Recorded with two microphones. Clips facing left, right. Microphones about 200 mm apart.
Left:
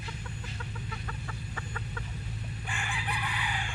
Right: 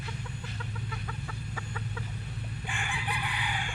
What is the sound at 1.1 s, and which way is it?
Chicken, 5° right (ahead or behind).